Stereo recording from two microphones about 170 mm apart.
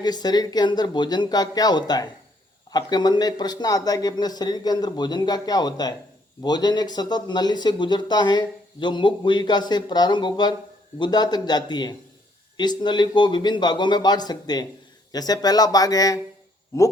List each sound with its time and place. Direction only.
0.0 s speech: 25° left (ahead or behind)